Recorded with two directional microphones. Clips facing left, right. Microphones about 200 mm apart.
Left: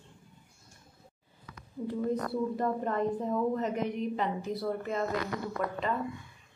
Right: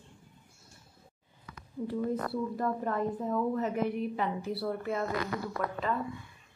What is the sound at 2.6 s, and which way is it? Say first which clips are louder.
A woman's voice: left 1 dB; centre (ahead or behind).